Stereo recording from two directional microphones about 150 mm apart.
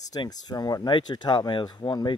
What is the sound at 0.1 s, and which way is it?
Speech, 25° left (ahead or behind).